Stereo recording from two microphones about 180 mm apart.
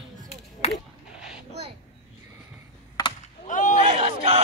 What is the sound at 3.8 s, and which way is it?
Battle cry, 30° right (ahead or behind).